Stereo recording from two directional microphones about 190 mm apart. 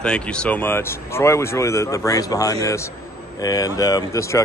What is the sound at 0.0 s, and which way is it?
A man's voice, 5° left (ahead or behind).